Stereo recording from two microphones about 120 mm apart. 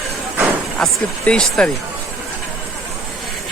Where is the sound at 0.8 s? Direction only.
5° left (ahead or behind).